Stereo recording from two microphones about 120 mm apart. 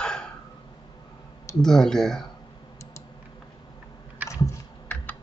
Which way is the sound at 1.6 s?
5° left (ahead or behind).